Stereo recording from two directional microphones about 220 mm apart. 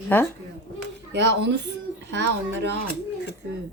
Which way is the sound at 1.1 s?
50° right (ahead or behind).